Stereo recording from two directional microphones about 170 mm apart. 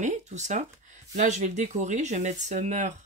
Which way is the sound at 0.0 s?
45° right (ahead or behind).